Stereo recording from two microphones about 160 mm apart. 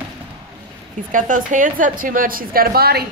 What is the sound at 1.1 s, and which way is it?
A woman's voice, 55° right (ahead or behind).